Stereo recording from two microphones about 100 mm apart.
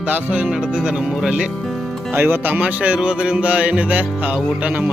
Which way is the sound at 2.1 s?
20° right (ahead or behind).